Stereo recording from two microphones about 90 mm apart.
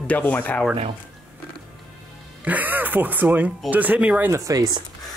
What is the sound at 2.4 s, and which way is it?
Speech, 20° right (ahead or behind).